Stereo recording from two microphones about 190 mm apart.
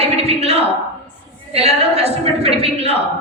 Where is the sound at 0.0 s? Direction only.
30° right (ahead or behind).